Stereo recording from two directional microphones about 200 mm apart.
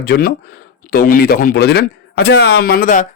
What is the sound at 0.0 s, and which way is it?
A man's voice, 50° left (ahead or behind).